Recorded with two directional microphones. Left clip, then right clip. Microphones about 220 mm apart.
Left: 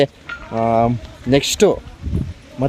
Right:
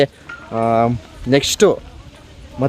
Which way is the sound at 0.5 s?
5° left (ahead or behind).